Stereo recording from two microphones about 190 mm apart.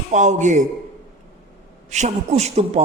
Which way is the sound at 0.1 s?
40° right (ahead or behind).